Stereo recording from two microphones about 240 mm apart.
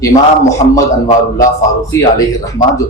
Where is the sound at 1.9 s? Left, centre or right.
Centre.